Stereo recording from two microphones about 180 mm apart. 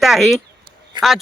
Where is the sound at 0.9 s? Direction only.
25° right (ahead or behind).